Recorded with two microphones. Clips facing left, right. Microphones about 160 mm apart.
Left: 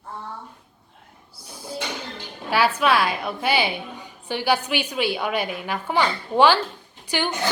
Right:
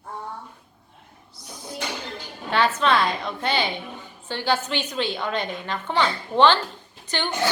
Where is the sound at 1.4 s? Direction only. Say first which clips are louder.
Left 3 dB; 30° left (ahead or behind).